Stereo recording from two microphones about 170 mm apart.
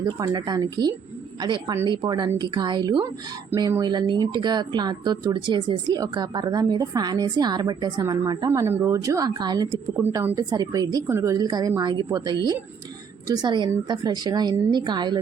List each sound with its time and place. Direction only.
0.0 s speech: 25° right (ahead or behind)